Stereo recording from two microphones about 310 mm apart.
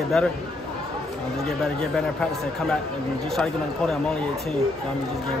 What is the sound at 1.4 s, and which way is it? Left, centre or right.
Speech, centre.